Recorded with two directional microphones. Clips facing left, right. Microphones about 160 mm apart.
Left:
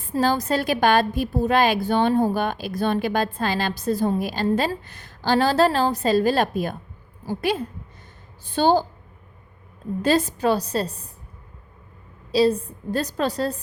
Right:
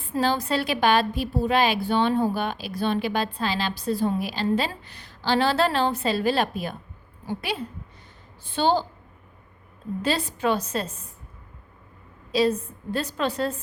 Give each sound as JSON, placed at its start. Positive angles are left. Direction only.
{"t": 0.1, "sound": "a woman's voice", "side_deg": 40}
{"t": 10.0, "sound": "a woman's voice", "side_deg": 45}
{"t": 12.3, "sound": "a woman's voice", "side_deg": 35}